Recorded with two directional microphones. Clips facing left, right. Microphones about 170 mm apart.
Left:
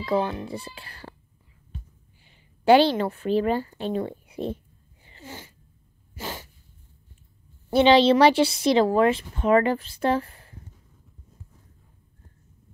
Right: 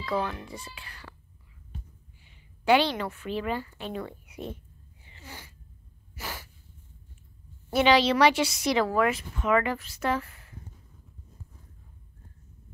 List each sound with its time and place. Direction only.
0.0 s a child's voice: 25° left (ahead or behind)
2.2 s a woman's voice: 35° left (ahead or behind)
5.2 s sneeze: 25° left (ahead or behind)
7.7 s a woman's voice: 30° left (ahead or behind)